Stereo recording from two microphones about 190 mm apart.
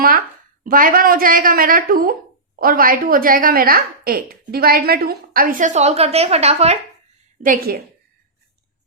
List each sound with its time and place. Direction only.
0.6 s a woman's voice: 45° right (ahead or behind)
7.4 s a woman's voice: 45° right (ahead or behind)